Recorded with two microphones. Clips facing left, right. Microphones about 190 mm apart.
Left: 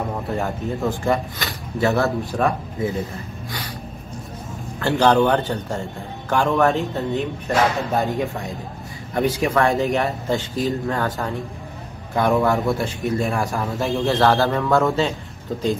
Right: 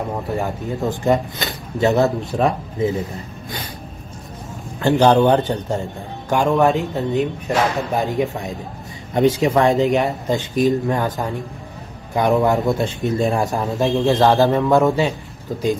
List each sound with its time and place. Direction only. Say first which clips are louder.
0.4 s speech: right 1 dB; 20° right (ahead or behind)
4.7 s speech: right 3 dB; 20° right (ahead or behind)